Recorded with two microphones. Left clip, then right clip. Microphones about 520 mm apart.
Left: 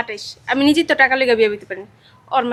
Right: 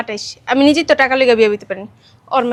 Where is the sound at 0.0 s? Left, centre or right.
Right.